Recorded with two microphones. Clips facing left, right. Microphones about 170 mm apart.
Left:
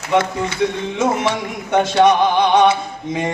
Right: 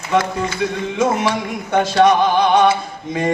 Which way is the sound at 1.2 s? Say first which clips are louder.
Even; 20° left (ahead or behind).